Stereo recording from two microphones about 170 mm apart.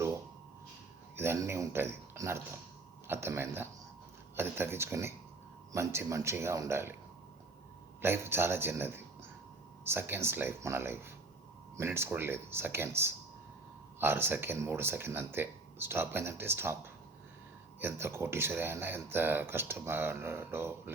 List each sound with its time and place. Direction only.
1.1 s speech: 15° right (ahead or behind)
8.0 s speech: 15° right (ahead or behind)
17.7 s speech: 15° right (ahead or behind)